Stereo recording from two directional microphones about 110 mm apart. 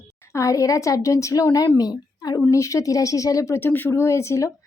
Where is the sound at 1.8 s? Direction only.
35° left (ahead or behind).